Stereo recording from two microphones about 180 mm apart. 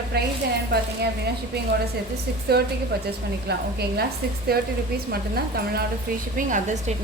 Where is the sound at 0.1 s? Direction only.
60° right (ahead or behind).